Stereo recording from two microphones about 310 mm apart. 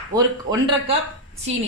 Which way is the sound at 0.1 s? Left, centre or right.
Centre.